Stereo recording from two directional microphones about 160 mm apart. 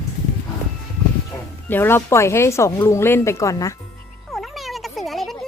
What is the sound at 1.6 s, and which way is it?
Speech, 15° left (ahead or behind).